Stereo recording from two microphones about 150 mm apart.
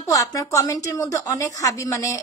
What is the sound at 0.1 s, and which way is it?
Speech, 20° left (ahead or behind).